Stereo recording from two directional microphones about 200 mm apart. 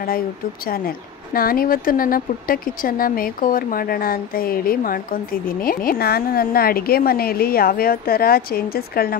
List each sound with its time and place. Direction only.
0.7 s speech: 45° left (ahead or behind)